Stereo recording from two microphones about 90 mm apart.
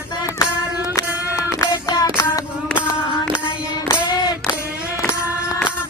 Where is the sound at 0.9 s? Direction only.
45° left (ahead or behind).